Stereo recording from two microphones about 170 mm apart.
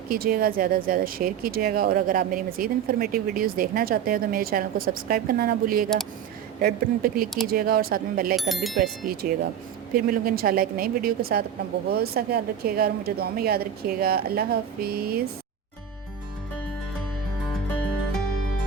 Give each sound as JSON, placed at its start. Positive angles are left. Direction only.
{"t": 0.1, "sound": "speech", "side_deg": -60}
{"t": 8.4, "sound": "speech", "side_deg": 0}
{"t": 8.8, "sound": "speech", "side_deg": -60}